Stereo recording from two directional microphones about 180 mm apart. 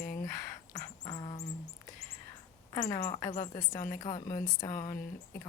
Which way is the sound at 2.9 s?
15° left (ahead or behind).